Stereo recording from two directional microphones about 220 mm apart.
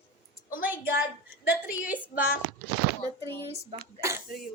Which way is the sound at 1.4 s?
50° left (ahead or behind).